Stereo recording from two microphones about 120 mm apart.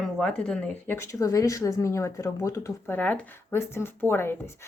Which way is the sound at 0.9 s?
25° left (ahead or behind).